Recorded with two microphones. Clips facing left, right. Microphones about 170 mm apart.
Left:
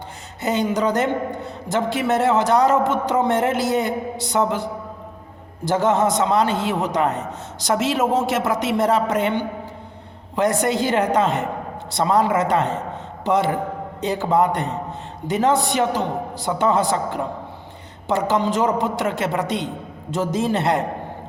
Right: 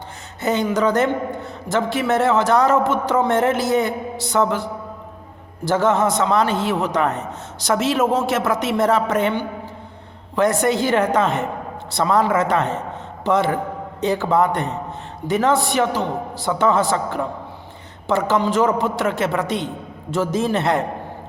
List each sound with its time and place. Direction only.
0.4 s a man's voice: 15° left (ahead or behind)
5.6 s a man's voice: 15° left (ahead or behind)